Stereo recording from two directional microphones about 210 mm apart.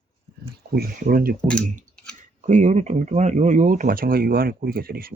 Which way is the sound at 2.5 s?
35° right (ahead or behind).